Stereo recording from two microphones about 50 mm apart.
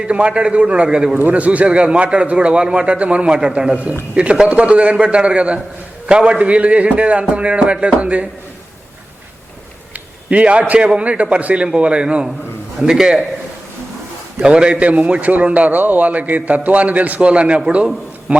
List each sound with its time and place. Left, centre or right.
0.0 s a man's voice: right
1.3 s a man's voice: right
10.2 s a man's voice: right
14.4 s a man's voice: centre